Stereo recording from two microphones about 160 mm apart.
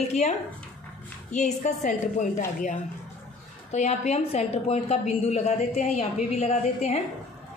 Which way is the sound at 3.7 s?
45° left (ahead or behind).